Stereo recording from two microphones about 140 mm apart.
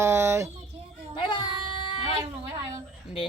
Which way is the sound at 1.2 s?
35° left (ahead or behind).